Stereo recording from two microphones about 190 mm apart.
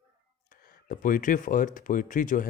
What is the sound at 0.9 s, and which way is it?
A man's voice, 45° left (ahead or behind).